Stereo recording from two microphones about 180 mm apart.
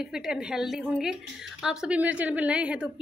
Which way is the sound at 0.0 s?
5° right (ahead or behind).